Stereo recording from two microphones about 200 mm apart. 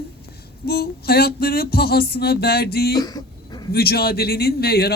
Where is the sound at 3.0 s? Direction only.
20° left (ahead or behind).